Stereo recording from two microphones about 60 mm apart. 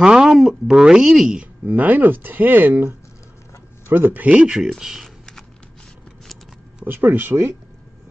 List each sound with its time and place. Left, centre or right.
0.0 s a sound: centre
0.7 s speech: centre
1.3 s speech: right
4.3 s speech: centre
5.0 s a sound: centre
6.9 s speech: right